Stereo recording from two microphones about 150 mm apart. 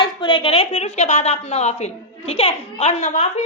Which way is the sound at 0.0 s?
30° left (ahead or behind).